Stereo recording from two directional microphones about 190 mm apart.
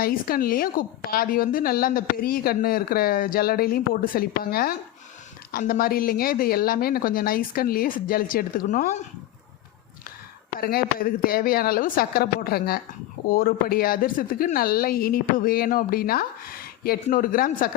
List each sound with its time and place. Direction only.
0.0 s a woman's voice: 50° left (ahead or behind)
10.6 s a woman's voice: 50° left (ahead or behind)